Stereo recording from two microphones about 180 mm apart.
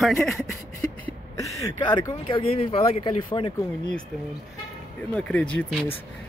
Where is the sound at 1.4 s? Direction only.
15° left (ahead or behind).